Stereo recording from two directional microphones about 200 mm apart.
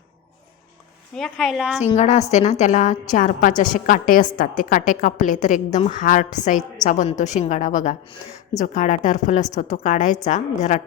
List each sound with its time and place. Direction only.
1.1 s a woman's voice: centre (ahead or behind)
2.0 s a woman's voice: 35° left (ahead or behind)